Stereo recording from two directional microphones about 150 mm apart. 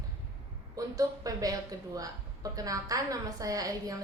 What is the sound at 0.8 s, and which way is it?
A woman's voice, 25° right (ahead or behind).